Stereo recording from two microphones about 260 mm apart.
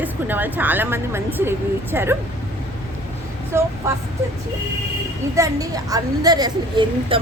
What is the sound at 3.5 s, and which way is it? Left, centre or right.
Speech, centre.